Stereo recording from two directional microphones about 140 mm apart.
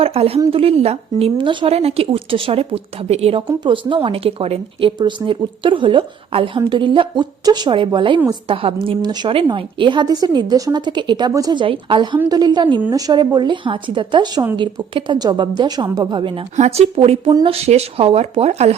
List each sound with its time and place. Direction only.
0.0 s speech: 45° right (ahead or behind)
3.6 s a woman's voice: 35° right (ahead or behind)
11.6 s a woman's voice: 40° right (ahead or behind)
16.6 s speech: 50° right (ahead or behind)